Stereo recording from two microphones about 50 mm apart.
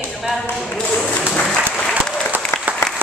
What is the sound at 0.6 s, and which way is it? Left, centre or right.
Speech, centre.